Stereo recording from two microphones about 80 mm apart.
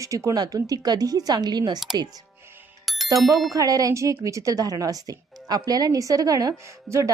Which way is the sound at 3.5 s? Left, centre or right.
Right.